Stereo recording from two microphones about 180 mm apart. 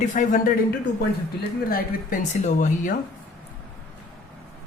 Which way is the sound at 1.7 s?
50° left (ahead or behind).